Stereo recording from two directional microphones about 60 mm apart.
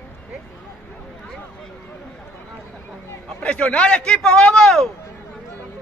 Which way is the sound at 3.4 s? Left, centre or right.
Left.